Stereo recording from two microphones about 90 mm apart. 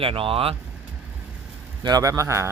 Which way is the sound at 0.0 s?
85° right.